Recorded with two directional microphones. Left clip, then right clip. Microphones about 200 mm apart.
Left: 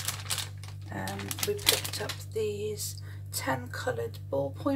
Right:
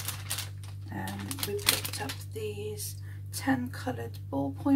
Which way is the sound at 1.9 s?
Centre (ahead or behind).